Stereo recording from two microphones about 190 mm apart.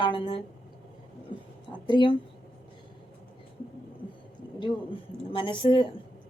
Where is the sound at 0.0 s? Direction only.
25° left (ahead or behind).